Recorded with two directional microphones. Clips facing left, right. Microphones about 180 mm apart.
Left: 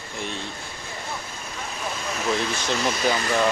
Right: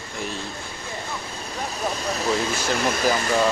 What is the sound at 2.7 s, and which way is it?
Speech, 5° right (ahead or behind).